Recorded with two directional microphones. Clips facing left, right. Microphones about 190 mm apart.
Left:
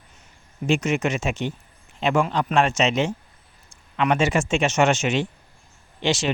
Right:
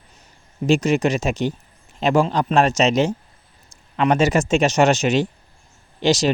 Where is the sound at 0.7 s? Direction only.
35° right (ahead or behind).